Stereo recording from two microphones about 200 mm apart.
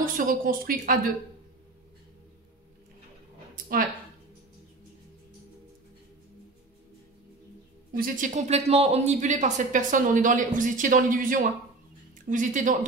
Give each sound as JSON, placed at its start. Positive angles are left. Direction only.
{"t": 0.0, "sound": "a woman's voice", "side_deg": -45}
{"t": 3.5, "sound": "a sound", "side_deg": -45}
{"t": 7.9, "sound": "speech", "side_deg": -45}